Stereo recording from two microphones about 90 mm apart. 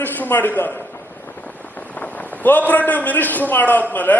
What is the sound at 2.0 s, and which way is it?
A man's voice, 20° left (ahead or behind).